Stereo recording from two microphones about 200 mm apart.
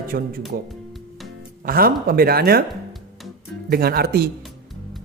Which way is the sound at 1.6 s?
45° right (ahead or behind).